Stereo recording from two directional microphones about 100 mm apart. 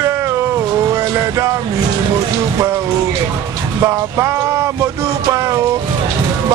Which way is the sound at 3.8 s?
30° right (ahead or behind).